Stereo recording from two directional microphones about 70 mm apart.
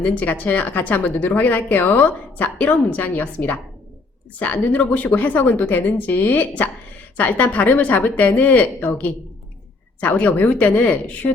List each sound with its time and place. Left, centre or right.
0.2 s speech: left